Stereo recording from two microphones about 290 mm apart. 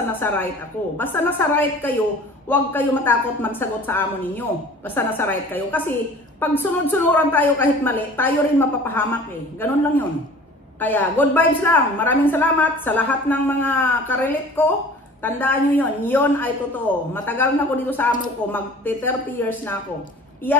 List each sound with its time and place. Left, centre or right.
0.2 s a woman's voice: centre
10.8 s a woman's voice: centre